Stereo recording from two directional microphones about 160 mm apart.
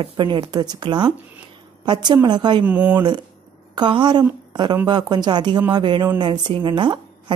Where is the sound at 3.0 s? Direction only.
25° right (ahead or behind).